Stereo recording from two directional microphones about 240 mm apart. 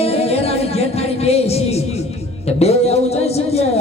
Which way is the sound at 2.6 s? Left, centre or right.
Left.